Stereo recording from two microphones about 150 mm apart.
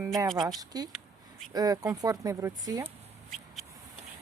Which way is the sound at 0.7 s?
25° right (ahead or behind).